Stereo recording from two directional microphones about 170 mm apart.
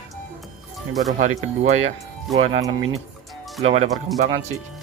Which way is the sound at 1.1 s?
45° right (ahead or behind).